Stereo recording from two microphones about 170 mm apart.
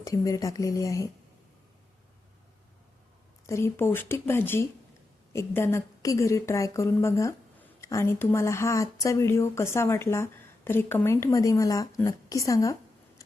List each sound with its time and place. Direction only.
0.0 s speech: 20° left (ahead or behind)
3.4 s speech: 15° left (ahead or behind)